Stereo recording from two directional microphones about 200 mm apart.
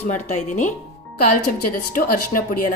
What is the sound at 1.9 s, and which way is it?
Speech, 45° left (ahead or behind).